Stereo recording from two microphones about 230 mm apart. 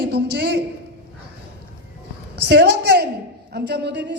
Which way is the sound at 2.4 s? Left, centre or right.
Right.